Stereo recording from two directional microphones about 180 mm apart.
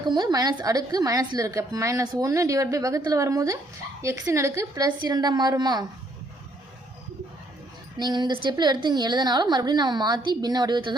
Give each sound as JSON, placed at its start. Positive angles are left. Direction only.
{"t": 0.1, "sound": "a woman's voice", "side_deg": -20}
{"t": 7.9, "sound": "a woman's voice", "side_deg": -25}